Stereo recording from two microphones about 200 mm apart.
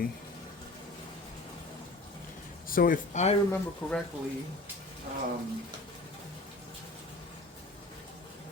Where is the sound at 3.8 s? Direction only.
20° left (ahead or behind).